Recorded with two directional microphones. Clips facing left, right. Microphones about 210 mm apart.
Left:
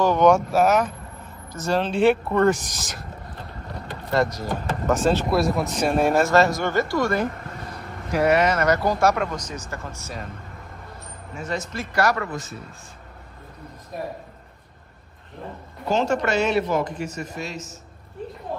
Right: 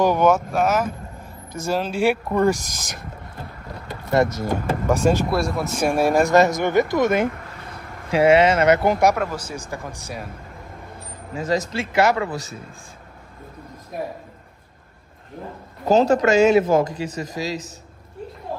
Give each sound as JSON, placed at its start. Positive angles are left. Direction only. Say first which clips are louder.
{"t": 0.0, "sound": "speech", "louder": "even", "side_deg": -10}
{"t": 2.5, "sound": "speech", "louder": "even", "side_deg": -50}
{"t": 4.1, "sound": "speech", "louder": "right 3 dB", "side_deg": -20}
{"t": 4.8, "sound": "speech", "louder": "right 1 dB", "side_deg": -10}
{"t": 5.3, "sound": "speech", "louder": "left 1 dB", "side_deg": 0}
{"t": 5.9, "sound": "speech", "louder": "right 2 dB", "side_deg": -10}
{"t": 9.1, "sound": "speech", "louder": "right 1 dB", "side_deg": -5}
{"t": 11.3, "sound": "speech", "louder": "right 6 dB", "side_deg": -90}
{"t": 11.8, "sound": "speech", "louder": "right 1 dB", "side_deg": -25}
{"t": 15.8, "sound": "speech", "louder": "right 6 dB", "side_deg": -40}